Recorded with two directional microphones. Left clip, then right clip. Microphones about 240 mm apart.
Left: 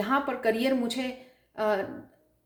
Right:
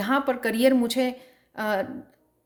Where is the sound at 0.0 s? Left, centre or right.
Right.